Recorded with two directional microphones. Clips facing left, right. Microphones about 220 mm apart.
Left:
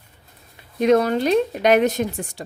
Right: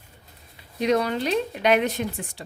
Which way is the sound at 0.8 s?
50° left (ahead or behind).